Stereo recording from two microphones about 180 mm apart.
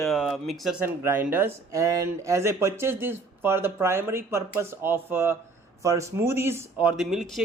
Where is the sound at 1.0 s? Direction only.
10° right (ahead or behind).